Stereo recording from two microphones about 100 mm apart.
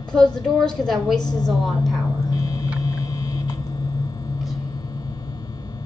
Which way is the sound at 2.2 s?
40° left (ahead or behind).